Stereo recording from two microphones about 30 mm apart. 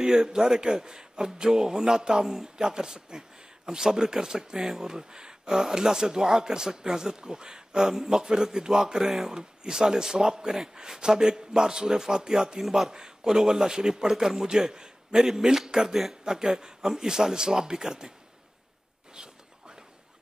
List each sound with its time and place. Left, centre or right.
0.0 s a man's voice: centre
5.6 s a man's voice: centre
12.6 s speech: centre
12.9 s a man's voice: right
14.7 s a man's voice: right